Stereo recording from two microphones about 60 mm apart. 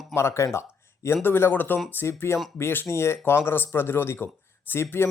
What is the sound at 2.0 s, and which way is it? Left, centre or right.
A man's voice, left.